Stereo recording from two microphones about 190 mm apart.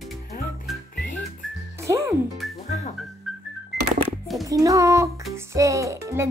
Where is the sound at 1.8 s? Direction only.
15° right (ahead or behind).